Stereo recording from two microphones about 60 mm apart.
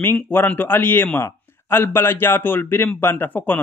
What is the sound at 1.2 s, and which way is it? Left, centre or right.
Speech, left.